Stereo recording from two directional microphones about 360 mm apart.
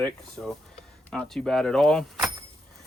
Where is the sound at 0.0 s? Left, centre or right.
Centre.